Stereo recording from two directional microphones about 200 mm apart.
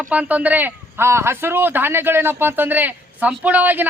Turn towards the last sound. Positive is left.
turn(degrees=-10)  # may be behind; listen again after turning